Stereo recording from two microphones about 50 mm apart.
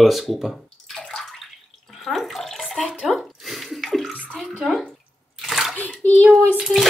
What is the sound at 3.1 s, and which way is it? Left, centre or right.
Bathtub, centre.